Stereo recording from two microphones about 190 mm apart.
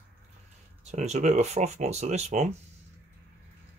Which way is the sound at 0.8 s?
35° right (ahead or behind).